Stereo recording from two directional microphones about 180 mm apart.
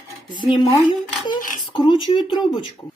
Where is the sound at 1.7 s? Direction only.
25° left (ahead or behind).